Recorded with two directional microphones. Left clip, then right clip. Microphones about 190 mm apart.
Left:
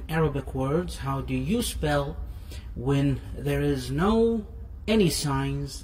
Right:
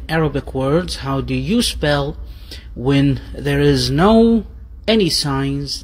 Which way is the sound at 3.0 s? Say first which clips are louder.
Right 9 dB; centre (ahead or behind).